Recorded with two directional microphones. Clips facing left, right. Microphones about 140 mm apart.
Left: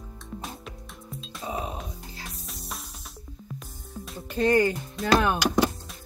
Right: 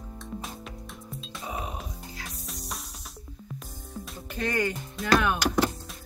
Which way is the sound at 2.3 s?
Centre (ahead or behind).